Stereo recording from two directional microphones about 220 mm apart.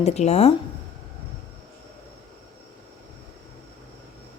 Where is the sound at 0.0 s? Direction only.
30° left (ahead or behind).